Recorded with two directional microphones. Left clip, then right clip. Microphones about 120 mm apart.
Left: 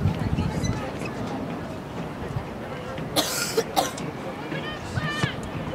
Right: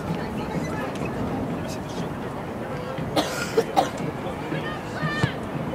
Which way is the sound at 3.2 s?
20° left (ahead or behind).